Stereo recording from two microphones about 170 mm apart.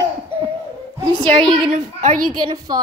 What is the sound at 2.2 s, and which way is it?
Speech, 25° right (ahead or behind).